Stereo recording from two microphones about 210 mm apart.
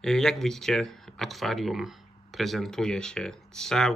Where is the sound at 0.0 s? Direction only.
Centre (ahead or behind).